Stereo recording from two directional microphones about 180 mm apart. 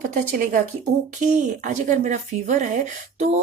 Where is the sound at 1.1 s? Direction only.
40° right (ahead or behind).